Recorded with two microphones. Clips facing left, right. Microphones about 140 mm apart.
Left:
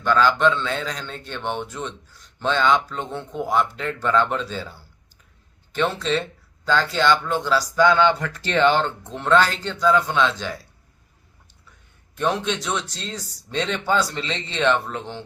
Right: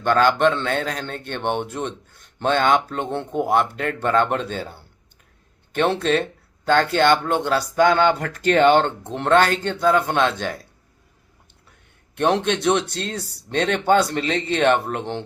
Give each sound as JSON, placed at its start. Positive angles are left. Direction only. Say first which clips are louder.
{"t": 0.0, "sound": "a man's voice", "louder": "right 2 dB", "side_deg": -55}
{"t": 12.1, "sound": "a man's voice", "louder": "right 4 dB", "side_deg": -60}